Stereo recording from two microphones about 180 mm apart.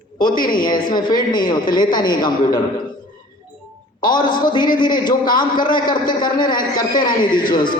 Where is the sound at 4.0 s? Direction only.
25° left (ahead or behind).